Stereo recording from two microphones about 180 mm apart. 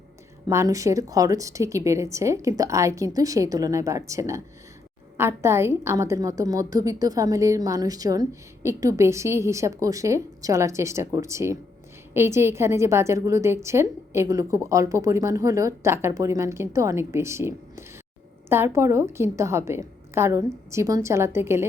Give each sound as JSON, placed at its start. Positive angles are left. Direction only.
{"t": 0.4, "sound": "a woman's voice", "side_deg": -15}